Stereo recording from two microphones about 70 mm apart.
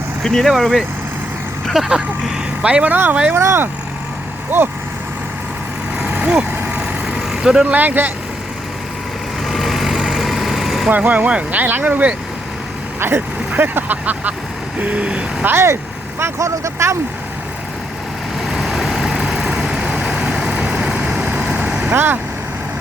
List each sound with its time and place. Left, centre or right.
0.2 s speech: centre
3.3 s speech: right
6.0 s vehicle: centre
7.7 s speech: right
9.5 s vehicle: centre
10.8 s speech: right
13.0 s speech: right; by 15.4 s centre
15.4 s speech: right
18.4 s vehicle: centre
21.8 s speech: right